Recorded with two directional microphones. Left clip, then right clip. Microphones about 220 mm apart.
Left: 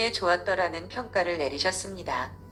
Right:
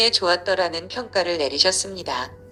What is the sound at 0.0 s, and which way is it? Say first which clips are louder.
A woman's voice: right 6 dB; 50° right (ahead or behind).